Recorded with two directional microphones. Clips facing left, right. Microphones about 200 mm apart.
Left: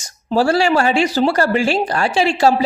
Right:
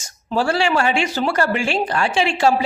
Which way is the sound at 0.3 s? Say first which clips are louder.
Left 4 dB; 40° left (ahead or behind).